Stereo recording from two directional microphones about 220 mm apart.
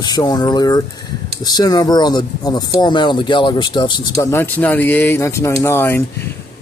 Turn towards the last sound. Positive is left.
turn(degrees=10)  # may be behind; listen again after turning